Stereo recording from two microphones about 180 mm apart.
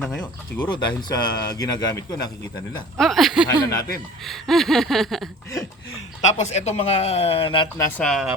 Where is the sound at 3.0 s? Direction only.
Centre (ahead or behind).